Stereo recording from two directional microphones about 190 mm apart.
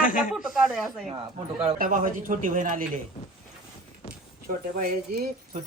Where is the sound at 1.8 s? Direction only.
45° right (ahead or behind).